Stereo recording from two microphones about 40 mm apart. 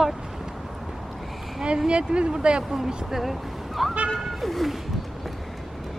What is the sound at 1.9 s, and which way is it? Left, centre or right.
Speech, right.